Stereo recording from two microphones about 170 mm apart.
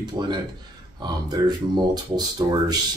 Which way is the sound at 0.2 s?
20° right (ahead or behind).